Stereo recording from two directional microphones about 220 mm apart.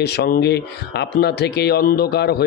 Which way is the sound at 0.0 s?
45° left (ahead or behind).